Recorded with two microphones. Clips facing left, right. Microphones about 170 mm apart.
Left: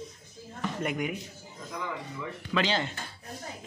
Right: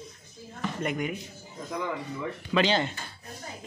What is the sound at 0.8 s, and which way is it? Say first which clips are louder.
Speech: right 1 dB; 5° left (ahead or behind).